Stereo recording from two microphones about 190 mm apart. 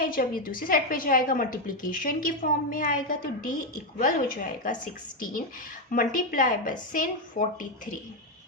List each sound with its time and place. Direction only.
0.0 s a woman's voice: 50° left (ahead or behind)